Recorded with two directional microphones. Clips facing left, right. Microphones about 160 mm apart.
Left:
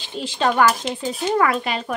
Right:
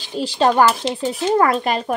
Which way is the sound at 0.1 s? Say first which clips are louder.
Right 4 dB; 35° right (ahead or behind).